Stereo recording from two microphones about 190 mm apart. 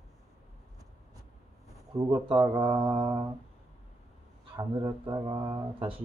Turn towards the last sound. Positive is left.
turn(degrees=-25)  # may be behind; listen again after turning